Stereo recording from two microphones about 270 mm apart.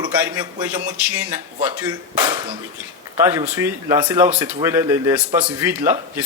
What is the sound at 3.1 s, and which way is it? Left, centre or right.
Speech, centre.